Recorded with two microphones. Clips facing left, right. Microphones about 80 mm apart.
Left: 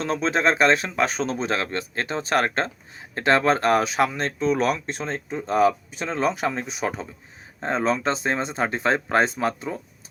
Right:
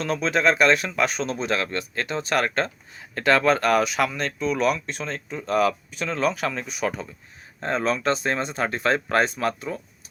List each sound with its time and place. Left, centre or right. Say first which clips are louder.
0.0 s speech: even; left